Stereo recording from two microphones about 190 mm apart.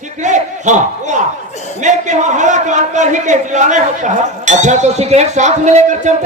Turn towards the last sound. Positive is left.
turn(degrees=-40)  # may be behind; listen again after turning